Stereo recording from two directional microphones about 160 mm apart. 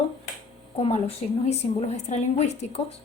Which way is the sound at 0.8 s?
40° left (ahead or behind).